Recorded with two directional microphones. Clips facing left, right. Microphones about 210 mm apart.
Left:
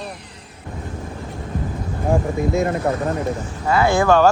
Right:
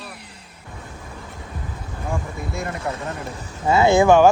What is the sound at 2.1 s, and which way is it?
Speech, 55° left (ahead or behind).